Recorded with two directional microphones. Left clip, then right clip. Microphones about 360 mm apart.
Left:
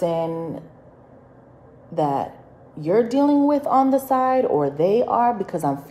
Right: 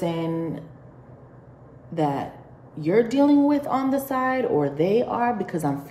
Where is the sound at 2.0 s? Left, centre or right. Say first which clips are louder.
Left 3 dB; centre.